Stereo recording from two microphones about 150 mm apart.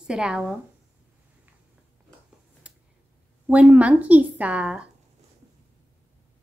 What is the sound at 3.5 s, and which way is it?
A woman's voice, 10° right (ahead or behind).